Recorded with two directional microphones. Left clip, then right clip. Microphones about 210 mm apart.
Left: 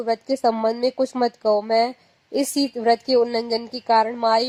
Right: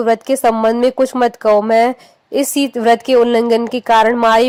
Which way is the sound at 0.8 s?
30° right (ahead or behind).